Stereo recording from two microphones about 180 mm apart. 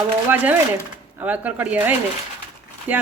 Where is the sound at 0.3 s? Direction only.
10° right (ahead or behind).